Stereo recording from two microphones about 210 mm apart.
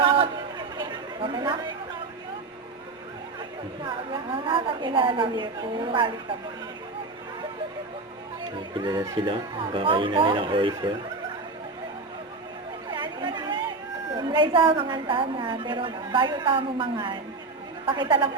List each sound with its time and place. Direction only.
0.0 s chatter: 25° right (ahead or behind)
3.8 s a woman's voice: 25° right (ahead or behind)
8.7 s a woman's voice: 20° right (ahead or behind)
12.9 s chatter: 20° right (ahead or behind)
14.2 s a woman's voice: 20° right (ahead or behind)